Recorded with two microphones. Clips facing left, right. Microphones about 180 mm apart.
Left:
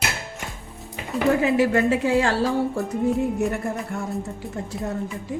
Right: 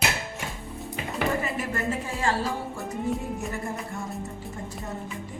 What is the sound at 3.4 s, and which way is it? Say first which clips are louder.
Speech: left 7 dB; 65° left (ahead or behind).